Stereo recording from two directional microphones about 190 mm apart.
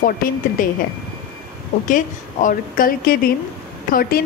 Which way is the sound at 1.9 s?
45° left (ahead or behind).